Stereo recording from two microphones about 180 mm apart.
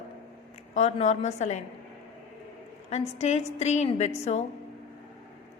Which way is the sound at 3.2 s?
40° left (ahead or behind).